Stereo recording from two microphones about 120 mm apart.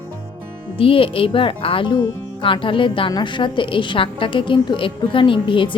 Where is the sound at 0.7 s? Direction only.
50° left (ahead or behind).